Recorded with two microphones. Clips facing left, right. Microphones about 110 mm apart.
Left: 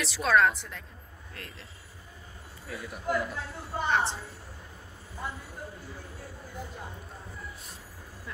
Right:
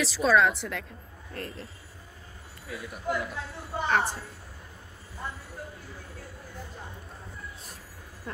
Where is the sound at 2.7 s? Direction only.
Centre (ahead or behind).